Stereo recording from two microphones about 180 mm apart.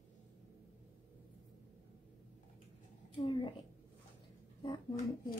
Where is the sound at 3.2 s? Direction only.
25° left (ahead or behind).